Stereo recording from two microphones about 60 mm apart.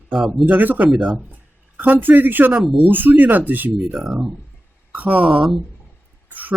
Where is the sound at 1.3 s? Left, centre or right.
Right.